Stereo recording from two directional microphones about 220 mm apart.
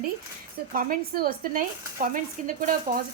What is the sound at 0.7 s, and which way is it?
Speech, 40° right (ahead or behind).